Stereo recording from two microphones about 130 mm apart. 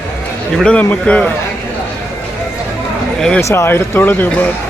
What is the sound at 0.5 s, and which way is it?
Speech, 5° left (ahead or behind).